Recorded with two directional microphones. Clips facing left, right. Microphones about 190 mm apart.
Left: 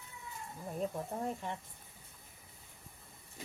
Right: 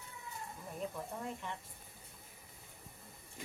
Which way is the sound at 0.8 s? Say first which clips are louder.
Left 5 dB; 40° left (ahead or behind).